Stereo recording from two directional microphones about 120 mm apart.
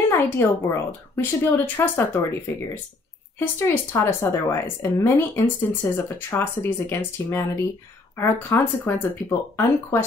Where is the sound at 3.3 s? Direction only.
20° left (ahead or behind).